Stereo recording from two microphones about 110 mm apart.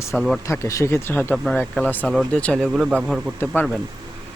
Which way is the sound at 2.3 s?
10° left (ahead or behind).